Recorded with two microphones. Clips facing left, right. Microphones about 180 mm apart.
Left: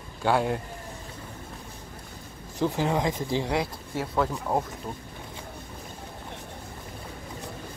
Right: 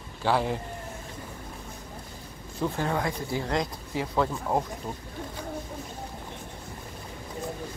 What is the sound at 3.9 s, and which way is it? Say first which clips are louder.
Speech: even; centre (ahead or behind).